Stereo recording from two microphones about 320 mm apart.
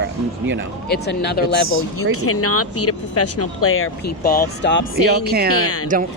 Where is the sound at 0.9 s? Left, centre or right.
Left.